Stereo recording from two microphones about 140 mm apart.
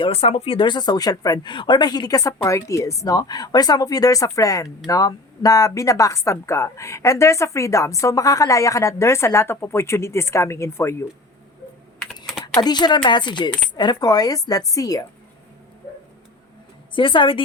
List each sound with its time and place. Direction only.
0.0 s a woman's voice: 45° left (ahead or behind); by 10.9 s 20° left (ahead or behind)
11.9 s computer keyboard: 5° left (ahead or behind)
12.5 s a woman's voice: 30° left (ahead or behind)
16.9 s speech: 35° left (ahead or behind)